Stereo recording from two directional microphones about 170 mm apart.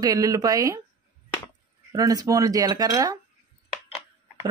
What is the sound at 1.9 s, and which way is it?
Speech, 20° right (ahead or behind).